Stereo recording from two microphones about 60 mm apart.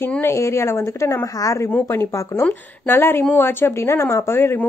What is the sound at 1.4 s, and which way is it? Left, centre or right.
Speech, left.